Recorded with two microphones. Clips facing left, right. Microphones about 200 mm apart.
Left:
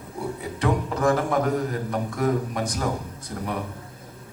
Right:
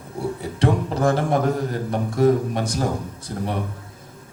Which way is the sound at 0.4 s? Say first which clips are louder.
Right 3 dB; 30° right (ahead or behind).